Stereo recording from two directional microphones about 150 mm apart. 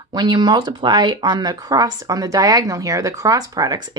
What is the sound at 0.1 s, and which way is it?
Speech, 30° right (ahead or behind).